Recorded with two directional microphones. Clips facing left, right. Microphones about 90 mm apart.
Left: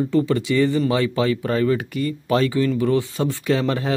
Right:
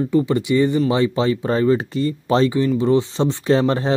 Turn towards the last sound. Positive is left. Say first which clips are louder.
# right 4 dB
turn(degrees=-30)  # may be behind; listen again after turning